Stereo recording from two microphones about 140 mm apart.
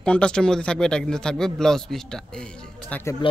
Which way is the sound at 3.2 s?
40° left (ahead or behind).